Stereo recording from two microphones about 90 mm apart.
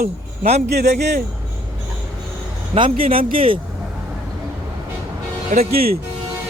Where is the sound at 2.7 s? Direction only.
80° right.